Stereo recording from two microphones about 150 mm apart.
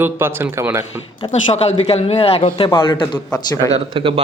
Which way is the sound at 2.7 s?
25° left (ahead or behind).